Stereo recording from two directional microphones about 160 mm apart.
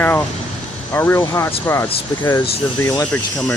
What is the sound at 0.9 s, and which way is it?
Speech, 15° left (ahead or behind).